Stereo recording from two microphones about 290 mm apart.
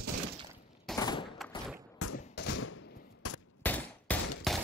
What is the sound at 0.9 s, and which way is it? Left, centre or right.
Fusillade, centre.